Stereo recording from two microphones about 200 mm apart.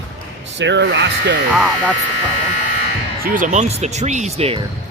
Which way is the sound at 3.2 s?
40° right (ahead or behind).